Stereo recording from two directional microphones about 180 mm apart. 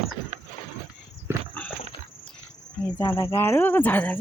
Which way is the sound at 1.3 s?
15° right (ahead or behind).